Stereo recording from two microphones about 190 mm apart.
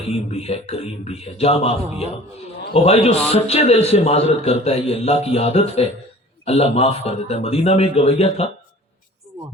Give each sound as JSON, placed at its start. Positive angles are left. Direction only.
{"t": 0.1, "sound": "a man's voice", "side_deg": 30}